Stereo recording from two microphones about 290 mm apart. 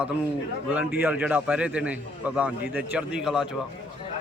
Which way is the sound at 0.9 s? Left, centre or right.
Centre.